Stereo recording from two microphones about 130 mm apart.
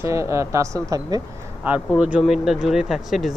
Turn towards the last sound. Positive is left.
turn(degrees=0)  # may be behind; listen again after turning